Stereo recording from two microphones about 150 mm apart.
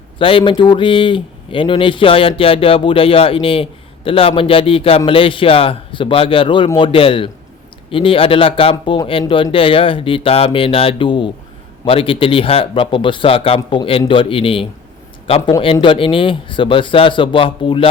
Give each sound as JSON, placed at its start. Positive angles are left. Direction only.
{"t": 0.2, "sound": "speech", "side_deg": 35}